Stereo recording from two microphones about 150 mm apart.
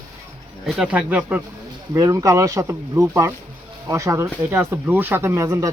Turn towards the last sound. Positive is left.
turn(degrees=-20)  # may be behind; listen again after turning